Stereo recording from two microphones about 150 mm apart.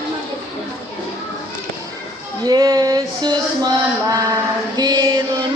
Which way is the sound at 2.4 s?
25° right (ahead or behind).